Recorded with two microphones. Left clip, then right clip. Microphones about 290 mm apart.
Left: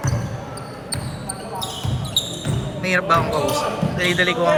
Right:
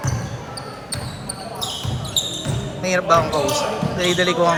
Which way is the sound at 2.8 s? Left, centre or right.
Centre.